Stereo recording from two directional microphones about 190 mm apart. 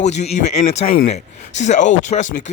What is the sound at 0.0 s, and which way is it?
A man's voice, 35° left (ahead or behind).